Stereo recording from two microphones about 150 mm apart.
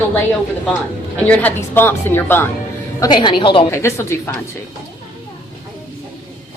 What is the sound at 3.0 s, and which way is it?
Speech, 30° left (ahead or behind).